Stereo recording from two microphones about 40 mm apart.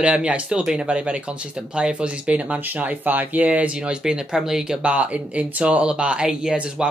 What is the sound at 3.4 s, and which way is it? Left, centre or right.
Speech, right.